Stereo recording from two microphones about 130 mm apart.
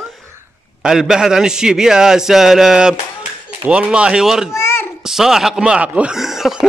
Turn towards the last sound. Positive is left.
turn(degrees=-5)  # may be behind; listen again after turning